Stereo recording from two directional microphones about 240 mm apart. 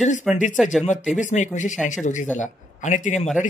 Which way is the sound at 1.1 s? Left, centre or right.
Left.